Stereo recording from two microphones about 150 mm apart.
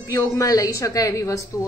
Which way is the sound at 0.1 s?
20° left (ahead or behind).